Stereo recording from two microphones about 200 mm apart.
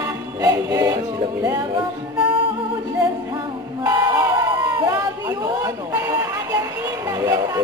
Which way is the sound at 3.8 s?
20° right (ahead or behind).